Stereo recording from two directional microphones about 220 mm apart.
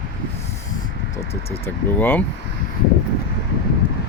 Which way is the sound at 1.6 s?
10° left (ahead or behind).